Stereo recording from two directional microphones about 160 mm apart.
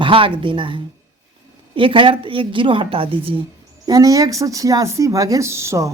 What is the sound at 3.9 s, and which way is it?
Speech, 25° right (ahead or behind).